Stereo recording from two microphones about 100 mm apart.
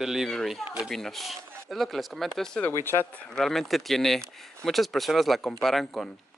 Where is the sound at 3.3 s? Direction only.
5° left (ahead or behind).